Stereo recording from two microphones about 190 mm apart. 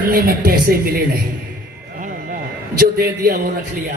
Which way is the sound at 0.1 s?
50° right (ahead or behind).